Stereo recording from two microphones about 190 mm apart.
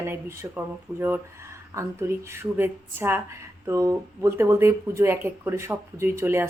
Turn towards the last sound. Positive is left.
turn(degrees=-10)  # may be behind; listen again after turning